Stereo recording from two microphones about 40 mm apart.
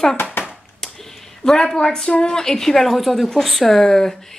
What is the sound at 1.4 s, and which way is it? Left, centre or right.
A woman's voice, centre.